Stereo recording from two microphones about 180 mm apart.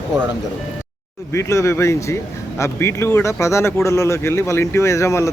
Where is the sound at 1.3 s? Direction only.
15° left (ahead or behind).